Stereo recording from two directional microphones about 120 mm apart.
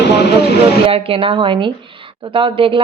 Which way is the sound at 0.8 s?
50° right (ahead or behind).